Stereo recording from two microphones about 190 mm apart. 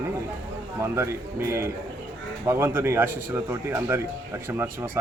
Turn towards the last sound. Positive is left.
turn(degrees=-10)  # may be behind; listen again after turning